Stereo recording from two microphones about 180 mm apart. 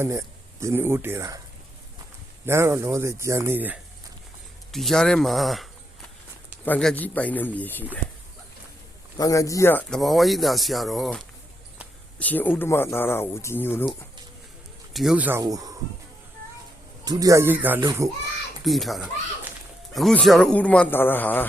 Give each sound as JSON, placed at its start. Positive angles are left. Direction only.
{"t": 0.0, "sound": "speech", "side_deg": -15}
{"t": 2.5, "sound": "speech", "side_deg": -15}
{"t": 4.7, "sound": "speech", "side_deg": 0}
{"t": 6.7, "sound": "speech", "side_deg": 5}
{"t": 9.1, "sound": "speech", "side_deg": 20}
{"t": 10.0, "sound": "speech", "side_deg": 0}
{"t": 12.2, "sound": "speech", "side_deg": 10}
{"t": 14.9, "sound": "speech", "side_deg": -5}
{"t": 17.1, "sound": "a child's voice", "side_deg": -20}
{"t": 18.6, "sound": "speech", "side_deg": 0}